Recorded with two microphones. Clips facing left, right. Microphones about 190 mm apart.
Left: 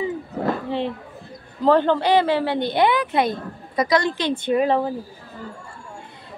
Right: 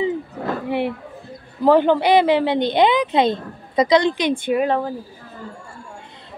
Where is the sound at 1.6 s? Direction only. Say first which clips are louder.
Right 3 dB; 10° right (ahead or behind).